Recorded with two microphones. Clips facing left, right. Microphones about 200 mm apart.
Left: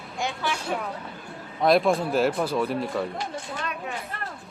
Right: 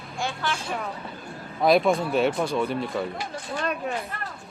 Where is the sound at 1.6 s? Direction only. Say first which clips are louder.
Even; centre (ahead or behind).